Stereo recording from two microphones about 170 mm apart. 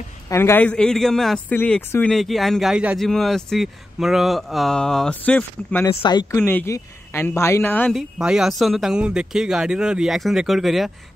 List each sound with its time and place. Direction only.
0.3 s speech: 15° left (ahead or behind)
6.0 s speech: 25° left (ahead or behind)
6.4 s speech: 15° left (ahead or behind)
7.9 s speech: 5° right (ahead or behind)